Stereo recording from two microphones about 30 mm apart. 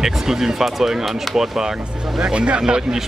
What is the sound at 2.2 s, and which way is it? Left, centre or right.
Speech, right.